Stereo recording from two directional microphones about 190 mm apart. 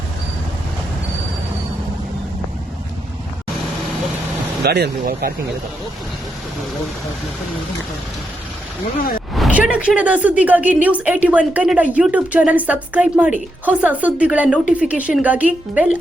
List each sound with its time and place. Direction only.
4.6 s speech: 60° right (ahead or behind)
9.0 s speech: 50° left (ahead or behind)
9.3 s a woman's voice: 5° right (ahead or behind)